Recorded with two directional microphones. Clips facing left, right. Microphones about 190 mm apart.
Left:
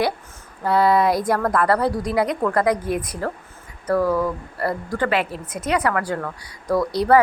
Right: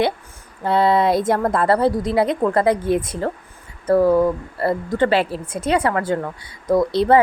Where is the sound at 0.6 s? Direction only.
25° right (ahead or behind).